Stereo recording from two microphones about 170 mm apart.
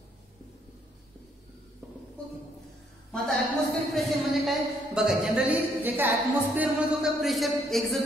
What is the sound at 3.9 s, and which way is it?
A woman's voice, centre (ahead or behind).